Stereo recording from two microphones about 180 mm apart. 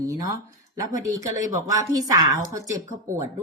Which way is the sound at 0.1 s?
20° right (ahead or behind).